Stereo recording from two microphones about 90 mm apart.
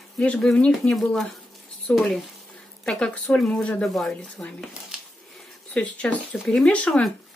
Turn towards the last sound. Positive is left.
turn(degrees=0)  # may be behind; listen again after turning